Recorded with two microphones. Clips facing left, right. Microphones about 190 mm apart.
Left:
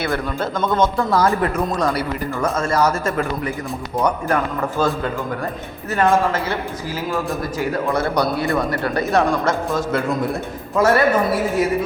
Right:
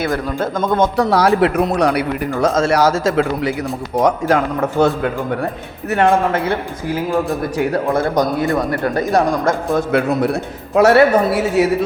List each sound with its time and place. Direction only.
0.3 s speech: 50° right (ahead or behind)
0.9 s a man's voice: 75° right (ahead or behind); by 4.4 s 90° right
4.8 s a man's voice: 70° right (ahead or behind)
8.1 s speech: 45° right (ahead or behind)
9.7 s a man's voice: 65° right (ahead or behind)